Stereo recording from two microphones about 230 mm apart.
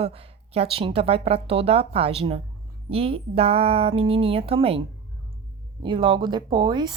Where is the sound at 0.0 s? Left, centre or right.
Right.